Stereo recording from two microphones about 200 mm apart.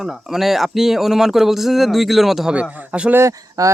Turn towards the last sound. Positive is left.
turn(degrees=-15)  # may be behind; listen again after turning